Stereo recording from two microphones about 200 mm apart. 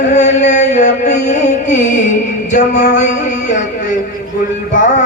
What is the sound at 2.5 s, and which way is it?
Music, 35° left (ahead or behind).